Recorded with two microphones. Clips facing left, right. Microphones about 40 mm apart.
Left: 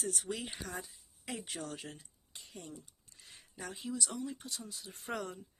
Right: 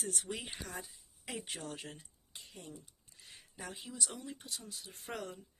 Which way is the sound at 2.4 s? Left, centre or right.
Centre.